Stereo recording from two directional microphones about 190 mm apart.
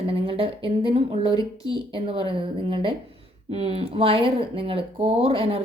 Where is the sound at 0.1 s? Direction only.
30° right (ahead or behind).